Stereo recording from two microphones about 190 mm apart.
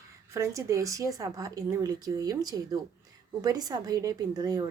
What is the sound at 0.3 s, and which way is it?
A woman's voice, 15° right (ahead or behind).